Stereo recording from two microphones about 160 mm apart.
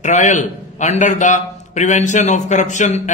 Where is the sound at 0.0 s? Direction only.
50° left (ahead or behind).